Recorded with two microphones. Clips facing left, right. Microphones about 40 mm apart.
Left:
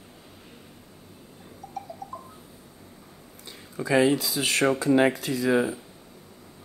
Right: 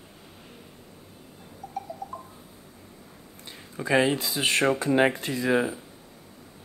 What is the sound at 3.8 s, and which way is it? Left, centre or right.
Speech, right.